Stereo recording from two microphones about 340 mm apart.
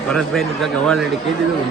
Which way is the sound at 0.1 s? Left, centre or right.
Centre.